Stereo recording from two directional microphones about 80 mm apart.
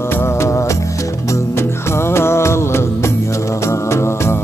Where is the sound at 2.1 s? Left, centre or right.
Left.